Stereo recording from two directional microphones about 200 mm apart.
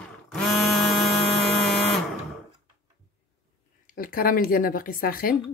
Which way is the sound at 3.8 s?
45° left (ahead or behind).